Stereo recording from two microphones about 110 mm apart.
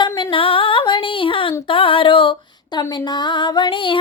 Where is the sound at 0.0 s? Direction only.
50° left (ahead or behind).